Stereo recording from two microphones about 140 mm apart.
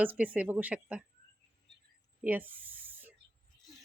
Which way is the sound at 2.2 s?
10° right (ahead or behind).